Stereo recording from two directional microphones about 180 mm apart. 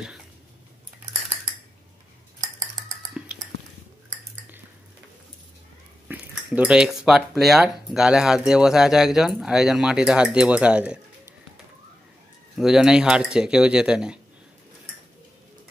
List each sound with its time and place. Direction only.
2.4 s cutlery: 20° right (ahead or behind)
6.0 s speech: 10° right (ahead or behind)
12.5 s speech: 5° right (ahead or behind)